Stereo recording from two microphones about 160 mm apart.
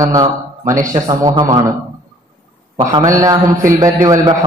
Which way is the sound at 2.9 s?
20° right (ahead or behind).